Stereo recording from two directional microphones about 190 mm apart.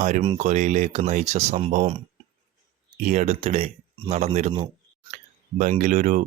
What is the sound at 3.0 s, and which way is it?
Speech, 40° right (ahead or behind).